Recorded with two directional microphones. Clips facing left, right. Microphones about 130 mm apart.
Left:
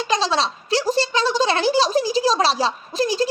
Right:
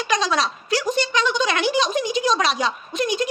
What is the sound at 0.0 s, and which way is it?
A child's voice, 30° left (ahead or behind).